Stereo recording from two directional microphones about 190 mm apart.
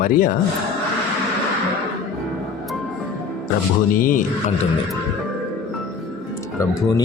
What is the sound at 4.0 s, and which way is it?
Speech, 45° left (ahead or behind).